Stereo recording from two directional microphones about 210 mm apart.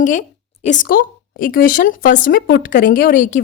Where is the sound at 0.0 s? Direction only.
35° left (ahead or behind).